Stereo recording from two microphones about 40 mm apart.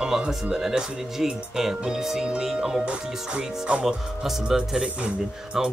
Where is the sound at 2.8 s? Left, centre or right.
Right.